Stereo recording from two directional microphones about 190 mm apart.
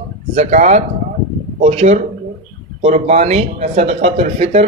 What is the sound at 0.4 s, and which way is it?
Speech, 40° right (ahead or behind).